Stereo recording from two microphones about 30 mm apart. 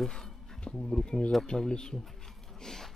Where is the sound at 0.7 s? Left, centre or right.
Left.